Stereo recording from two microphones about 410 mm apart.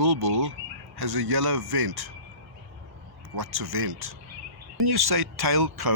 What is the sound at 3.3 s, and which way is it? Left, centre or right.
A man's voice, right.